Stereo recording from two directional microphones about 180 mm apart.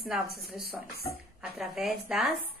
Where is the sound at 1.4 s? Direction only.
5° right (ahead or behind).